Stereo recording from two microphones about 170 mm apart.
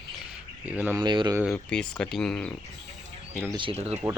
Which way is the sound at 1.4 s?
5° left (ahead or behind).